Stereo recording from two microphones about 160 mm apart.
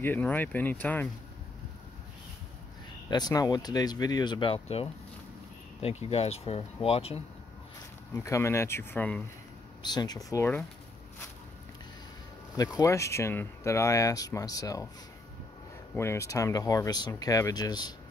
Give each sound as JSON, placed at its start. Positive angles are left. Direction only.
{"t": 0.0, "sound": "speech", "side_deg": 10}
{"t": 3.1, "sound": "speech", "side_deg": 25}
{"t": 8.1, "sound": "speech", "side_deg": 15}
{"t": 9.8, "sound": "speech", "side_deg": 25}
{"t": 12.5, "sound": "speech", "side_deg": 20}
{"t": 15.9, "sound": "speech", "side_deg": 15}